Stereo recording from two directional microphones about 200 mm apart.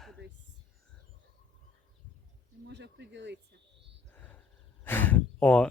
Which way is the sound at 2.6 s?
60° right (ahead or behind).